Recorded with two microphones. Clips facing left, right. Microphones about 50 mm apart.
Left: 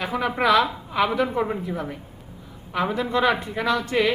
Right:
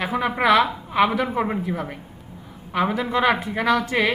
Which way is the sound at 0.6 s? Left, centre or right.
Right.